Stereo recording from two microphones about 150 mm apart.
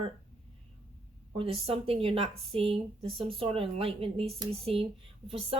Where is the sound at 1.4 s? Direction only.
40° right (ahead or behind).